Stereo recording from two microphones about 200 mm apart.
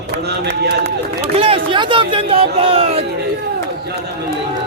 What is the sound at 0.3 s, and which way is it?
Speech, 55° right (ahead or behind).